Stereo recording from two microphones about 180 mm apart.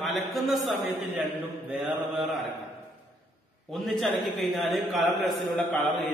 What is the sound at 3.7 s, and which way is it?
A man's voice, centre (ahead or behind).